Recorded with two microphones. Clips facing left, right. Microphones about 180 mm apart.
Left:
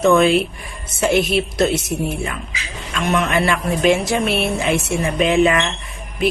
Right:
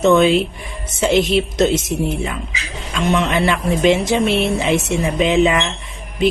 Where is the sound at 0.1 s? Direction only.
20° right (ahead or behind).